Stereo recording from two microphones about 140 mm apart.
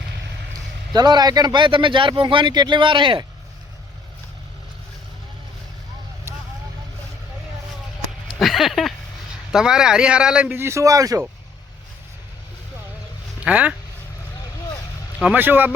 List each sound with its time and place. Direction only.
0.9 s speech: 30° right (ahead or behind)
8.4 s a man's voice: centre (ahead or behind); by 11.2 s 25° right (ahead or behind)
13.4 s speech: 10° right (ahead or behind)
15.2 s a man's voice: 10° right (ahead or behind)